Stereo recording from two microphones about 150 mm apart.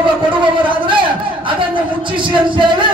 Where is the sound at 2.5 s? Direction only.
35° right (ahead or behind).